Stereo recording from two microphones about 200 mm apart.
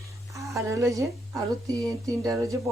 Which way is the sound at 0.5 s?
15° right (ahead or behind).